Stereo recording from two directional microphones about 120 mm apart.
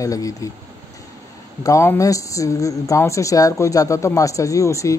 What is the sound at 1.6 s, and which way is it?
Speech, 25° left (ahead or behind).